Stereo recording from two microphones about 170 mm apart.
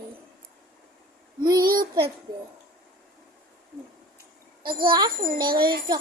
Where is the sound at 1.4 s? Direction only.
25° right (ahead or behind).